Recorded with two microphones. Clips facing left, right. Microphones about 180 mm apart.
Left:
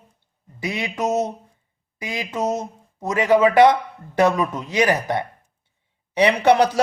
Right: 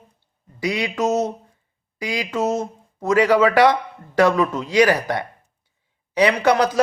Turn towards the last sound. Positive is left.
turn(degrees=30)  # may be behind; listen again after turning